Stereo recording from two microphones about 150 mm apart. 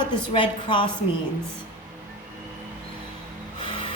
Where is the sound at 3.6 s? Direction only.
35° left (ahead or behind).